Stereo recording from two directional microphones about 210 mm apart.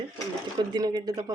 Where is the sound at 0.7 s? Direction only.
20° right (ahead or behind).